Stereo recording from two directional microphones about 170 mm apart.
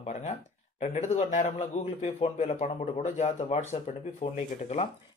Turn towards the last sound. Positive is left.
turn(degrees=45)  # may be behind; listen again after turning